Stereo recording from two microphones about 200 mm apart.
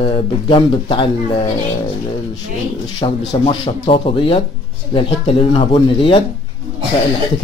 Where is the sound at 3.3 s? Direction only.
25° left (ahead or behind).